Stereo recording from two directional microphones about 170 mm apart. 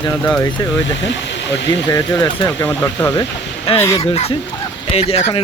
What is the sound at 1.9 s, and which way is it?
Speech, 25° left (ahead or behind).